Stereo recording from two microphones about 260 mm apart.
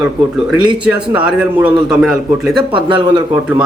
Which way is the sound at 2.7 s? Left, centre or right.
Centre.